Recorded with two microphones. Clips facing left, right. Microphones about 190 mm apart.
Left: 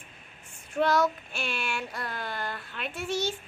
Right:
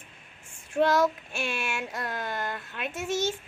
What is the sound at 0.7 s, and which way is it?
A child's voice, 25° right (ahead or behind).